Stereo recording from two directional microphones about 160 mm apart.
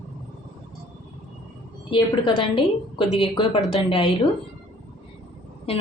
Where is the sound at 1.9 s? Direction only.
35° left (ahead or behind).